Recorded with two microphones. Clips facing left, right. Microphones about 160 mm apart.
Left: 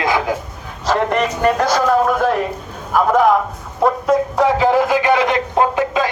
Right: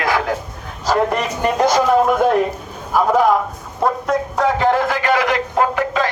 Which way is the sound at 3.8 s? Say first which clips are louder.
Left 3 dB; centre (ahead or behind).